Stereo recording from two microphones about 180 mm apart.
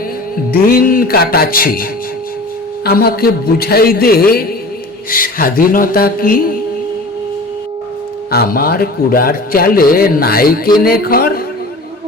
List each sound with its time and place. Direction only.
0.7 s speech: 55° left (ahead or behind)
5.1 s a sound: 50° left (ahead or behind)
8.3 s speech: 55° left (ahead or behind)